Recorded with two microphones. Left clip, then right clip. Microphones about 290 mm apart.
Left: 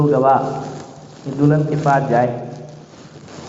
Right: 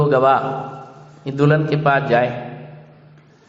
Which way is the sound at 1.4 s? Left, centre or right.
Right.